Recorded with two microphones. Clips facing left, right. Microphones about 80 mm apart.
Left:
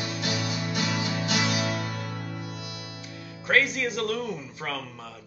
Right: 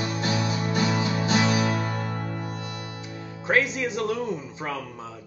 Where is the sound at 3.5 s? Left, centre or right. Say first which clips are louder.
Right 1 dB; right.